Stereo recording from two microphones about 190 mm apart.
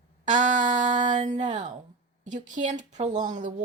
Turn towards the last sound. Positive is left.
turn(degrees=-40)  # may be behind; listen again after turning